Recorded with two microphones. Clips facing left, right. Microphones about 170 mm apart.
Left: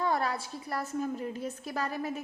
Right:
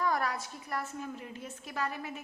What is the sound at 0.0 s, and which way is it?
A woman's voice, 25° left (ahead or behind).